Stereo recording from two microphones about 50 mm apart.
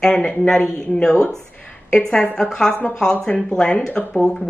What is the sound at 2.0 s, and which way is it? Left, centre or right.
Speech, centre.